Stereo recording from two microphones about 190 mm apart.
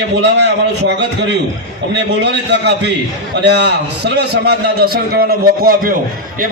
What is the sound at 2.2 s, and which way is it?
A man's voice, 65° right (ahead or behind).